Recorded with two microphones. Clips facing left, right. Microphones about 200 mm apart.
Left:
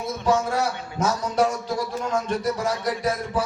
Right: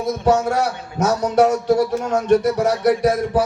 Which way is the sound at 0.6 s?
70° right (ahead or behind).